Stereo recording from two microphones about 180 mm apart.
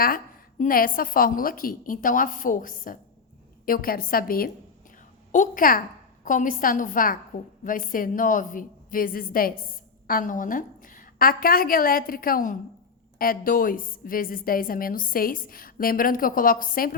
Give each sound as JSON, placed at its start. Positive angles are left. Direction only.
{"t": 0.6, "sound": "a woman's voice", "side_deg": 50}